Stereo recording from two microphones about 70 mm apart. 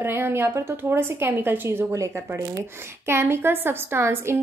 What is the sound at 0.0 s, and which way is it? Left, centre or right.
A woman's voice, right.